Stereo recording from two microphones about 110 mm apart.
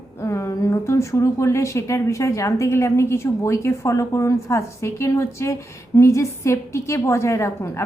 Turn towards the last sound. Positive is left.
turn(degrees=25)  # may be behind; listen again after turning